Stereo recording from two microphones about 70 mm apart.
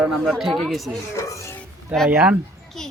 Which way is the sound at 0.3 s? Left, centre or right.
Centre.